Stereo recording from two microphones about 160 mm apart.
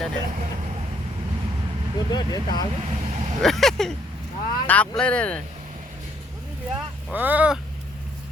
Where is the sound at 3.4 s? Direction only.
Centre (ahead or behind).